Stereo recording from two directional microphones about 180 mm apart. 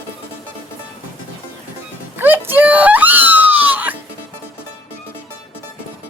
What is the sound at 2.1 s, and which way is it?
Screaming, 10° right (ahead or behind).